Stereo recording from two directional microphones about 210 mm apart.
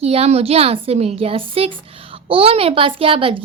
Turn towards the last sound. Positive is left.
turn(degrees=-25)  # may be behind; listen again after turning